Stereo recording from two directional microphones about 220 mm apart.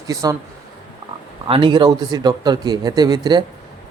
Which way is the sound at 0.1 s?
15° right (ahead or behind).